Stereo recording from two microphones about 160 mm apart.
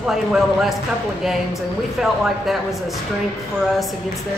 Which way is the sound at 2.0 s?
5° right (ahead or behind).